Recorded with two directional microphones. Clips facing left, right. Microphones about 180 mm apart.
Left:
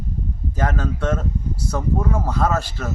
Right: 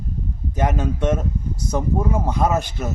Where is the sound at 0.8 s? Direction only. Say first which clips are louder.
Right 2 dB; 25° right (ahead or behind).